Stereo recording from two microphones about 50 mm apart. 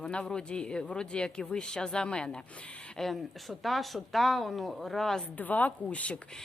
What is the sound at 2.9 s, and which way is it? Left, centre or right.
Speech, centre.